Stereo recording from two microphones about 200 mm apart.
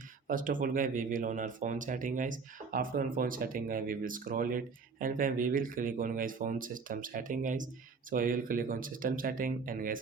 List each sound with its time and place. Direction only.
0.3 s speech: 40° right (ahead or behind)